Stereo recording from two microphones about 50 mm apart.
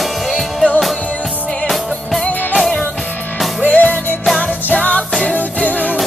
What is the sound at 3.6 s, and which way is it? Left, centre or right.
Music, left.